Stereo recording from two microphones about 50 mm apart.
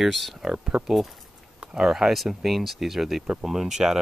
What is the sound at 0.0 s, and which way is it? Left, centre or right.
Speech, centre.